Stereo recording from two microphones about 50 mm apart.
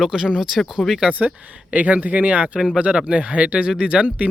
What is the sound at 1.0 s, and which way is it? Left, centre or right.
Speech, right.